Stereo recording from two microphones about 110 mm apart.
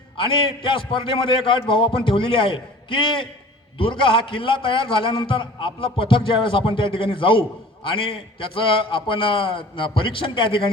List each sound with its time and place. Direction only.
0.2 s a man's voice: 50° left (ahead or behind)